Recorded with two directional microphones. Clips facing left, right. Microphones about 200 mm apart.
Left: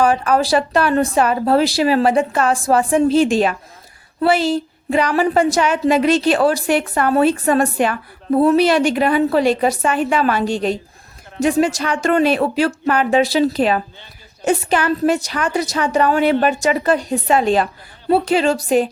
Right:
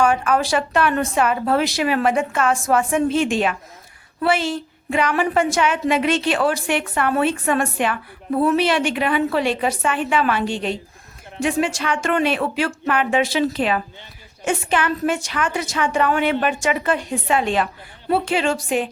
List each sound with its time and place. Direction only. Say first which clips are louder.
0.0 s a woman's voice: left 3 dB; 35° left (ahead or behind)